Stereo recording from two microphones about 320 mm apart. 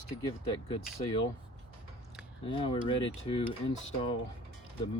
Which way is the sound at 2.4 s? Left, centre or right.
Centre.